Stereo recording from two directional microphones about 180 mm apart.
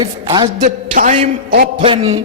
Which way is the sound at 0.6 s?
40° right (ahead or behind).